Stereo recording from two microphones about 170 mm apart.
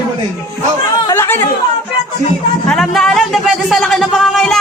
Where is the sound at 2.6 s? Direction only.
Centre (ahead or behind).